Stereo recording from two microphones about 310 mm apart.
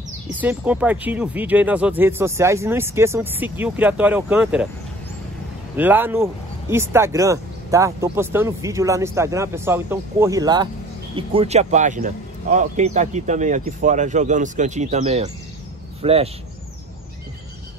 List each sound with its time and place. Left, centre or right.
0.3 s speech: centre
5.8 s speech: centre